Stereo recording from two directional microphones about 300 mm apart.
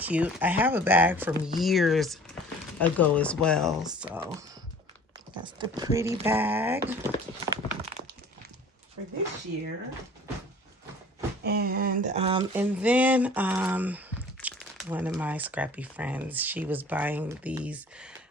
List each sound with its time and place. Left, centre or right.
0.0 s speech: centre
7.3 s a sound: centre
11.4 s speech: right; by 18.1 s centre